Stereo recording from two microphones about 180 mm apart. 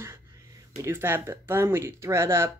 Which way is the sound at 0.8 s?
15° right (ahead or behind).